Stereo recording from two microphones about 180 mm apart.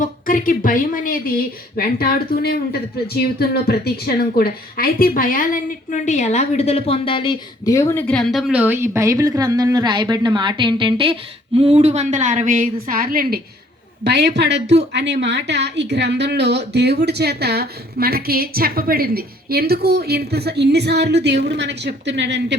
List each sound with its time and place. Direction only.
0.0 s a woman's voice: 50° left (ahead or behind); by 7.7 s 30° left (ahead or behind)
7.7 s speech: 15° left (ahead or behind); by 13.4 s 55° right (ahead or behind)
14.0 s speech: 65° right (ahead or behind)